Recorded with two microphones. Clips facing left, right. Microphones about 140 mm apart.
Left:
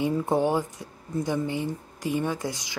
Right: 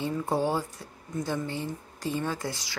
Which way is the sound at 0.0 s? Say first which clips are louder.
Left 4 dB; 20° left (ahead or behind).